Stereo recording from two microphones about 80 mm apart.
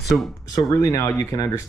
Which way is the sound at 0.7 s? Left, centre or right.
Left.